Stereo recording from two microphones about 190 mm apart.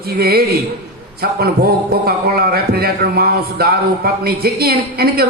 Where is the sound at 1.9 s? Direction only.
55° right (ahead or behind).